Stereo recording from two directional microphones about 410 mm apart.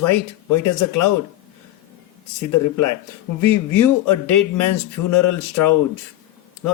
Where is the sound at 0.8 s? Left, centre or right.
Left.